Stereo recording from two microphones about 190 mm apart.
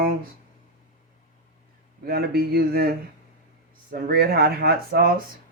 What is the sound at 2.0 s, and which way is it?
Speech, 55° right (ahead or behind).